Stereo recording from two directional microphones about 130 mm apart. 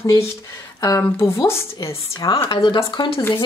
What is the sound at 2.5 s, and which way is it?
Speech, 40° left (ahead or behind).